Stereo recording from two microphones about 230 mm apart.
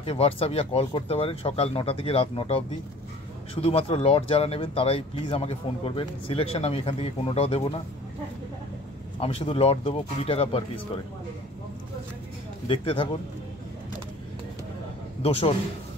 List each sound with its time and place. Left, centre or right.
0.0 s speech: left
3.6 s speech: left
9.2 s speech: left
12.6 s speech: left
15.2 s speech: left